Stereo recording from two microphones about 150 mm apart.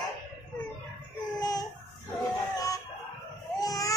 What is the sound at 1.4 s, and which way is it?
Baby cry, 25° left (ahead or behind).